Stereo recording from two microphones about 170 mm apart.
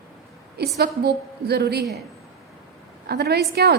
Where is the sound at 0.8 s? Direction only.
75° right (ahead or behind).